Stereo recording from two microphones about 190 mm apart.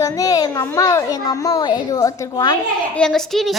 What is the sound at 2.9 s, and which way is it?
Speech, 5° left (ahead or behind).